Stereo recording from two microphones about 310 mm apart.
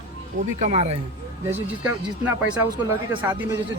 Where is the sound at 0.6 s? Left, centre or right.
Right.